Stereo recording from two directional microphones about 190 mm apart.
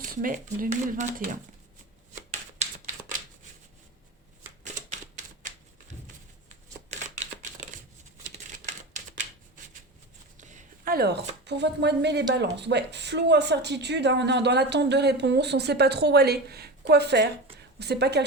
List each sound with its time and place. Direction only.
0.0 s speech: 45° right (ahead or behind)
2.6 s typewriter: 40° right (ahead or behind)
4.6 s typewriter: 40° right (ahead or behind)
6.7 s a sound: 35° right (ahead or behind)
10.3 s a sound: 40° right (ahead or behind); by 11.2 s 55° right (ahead or behind)
11.4 s speech: 65° right (ahead or behind)